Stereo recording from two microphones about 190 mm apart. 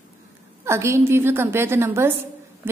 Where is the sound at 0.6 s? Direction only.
15° right (ahead or behind).